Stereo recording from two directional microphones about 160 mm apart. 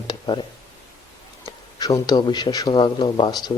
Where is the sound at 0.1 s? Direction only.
30° left (ahead or behind).